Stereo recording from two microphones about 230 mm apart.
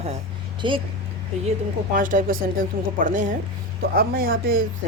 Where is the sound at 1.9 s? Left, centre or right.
Right.